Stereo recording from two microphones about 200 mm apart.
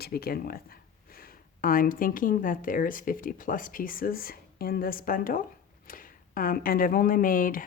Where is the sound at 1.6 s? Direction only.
45° left (ahead or behind).